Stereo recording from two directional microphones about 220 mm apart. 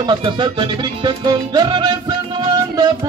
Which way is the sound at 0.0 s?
20° right (ahead or behind).